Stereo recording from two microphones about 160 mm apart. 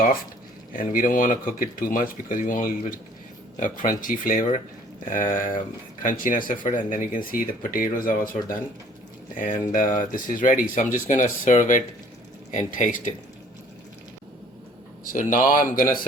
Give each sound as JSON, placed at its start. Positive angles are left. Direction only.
{"t": 0.7, "sound": "speech", "side_deg": 60}
{"t": 9.4, "sound": "speech", "side_deg": 55}
{"t": 15.0, "sound": "speech", "side_deg": 55}